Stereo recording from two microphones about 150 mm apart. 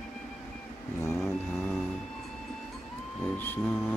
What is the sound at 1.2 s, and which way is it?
Vehicle, centre (ahead or behind).